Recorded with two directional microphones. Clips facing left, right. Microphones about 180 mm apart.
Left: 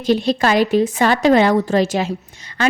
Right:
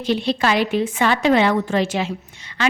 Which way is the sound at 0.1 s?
40° left (ahead or behind).